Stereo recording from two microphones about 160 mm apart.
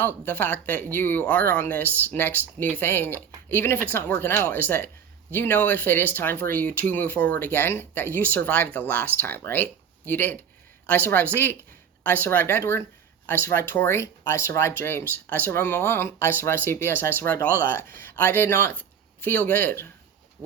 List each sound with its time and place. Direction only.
0.0 s speech: 10° left (ahead or behind)
12.0 s speech: 10° left (ahead or behind)